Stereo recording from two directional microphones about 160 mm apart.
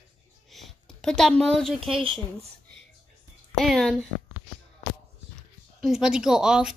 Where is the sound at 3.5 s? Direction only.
Centre (ahead or behind).